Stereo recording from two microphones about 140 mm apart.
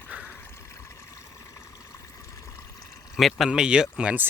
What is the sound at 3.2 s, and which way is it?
Speech, centre (ahead or behind).